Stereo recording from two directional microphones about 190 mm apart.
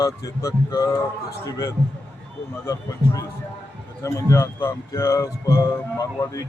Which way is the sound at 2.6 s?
15° left (ahead or behind).